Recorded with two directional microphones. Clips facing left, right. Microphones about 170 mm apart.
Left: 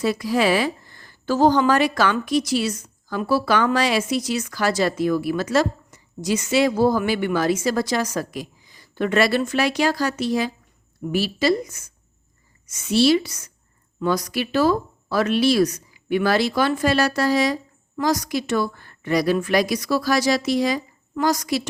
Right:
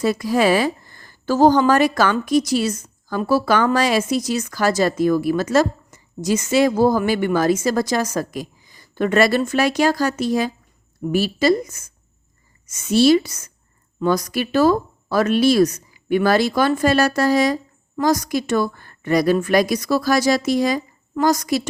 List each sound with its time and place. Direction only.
0.0 s a woman's voice: 45° right (ahead or behind)